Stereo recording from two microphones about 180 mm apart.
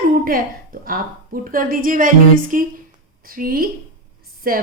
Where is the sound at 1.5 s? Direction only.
50° right (ahead or behind).